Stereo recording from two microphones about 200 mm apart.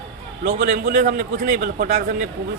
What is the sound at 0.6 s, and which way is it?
A man's voice, 40° right (ahead or behind).